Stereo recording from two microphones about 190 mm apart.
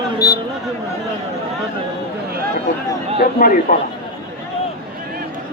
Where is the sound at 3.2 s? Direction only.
45° left (ahead or behind).